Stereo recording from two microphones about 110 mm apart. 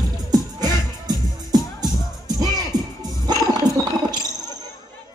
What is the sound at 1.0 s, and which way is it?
Music, 35° right (ahead or behind).